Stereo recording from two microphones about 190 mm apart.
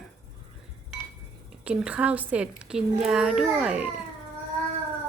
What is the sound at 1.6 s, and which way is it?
A child's voice, 5° right (ahead or behind).